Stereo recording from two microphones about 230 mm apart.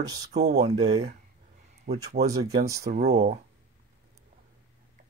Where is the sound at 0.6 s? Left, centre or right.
Right.